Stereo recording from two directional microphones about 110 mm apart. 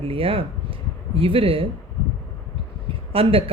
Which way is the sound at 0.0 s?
60° right (ahead or behind).